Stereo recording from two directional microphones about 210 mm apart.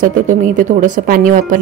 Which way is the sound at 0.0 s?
40° right (ahead or behind).